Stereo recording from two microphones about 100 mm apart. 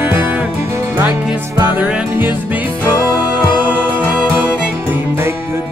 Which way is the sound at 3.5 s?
15° right (ahead or behind).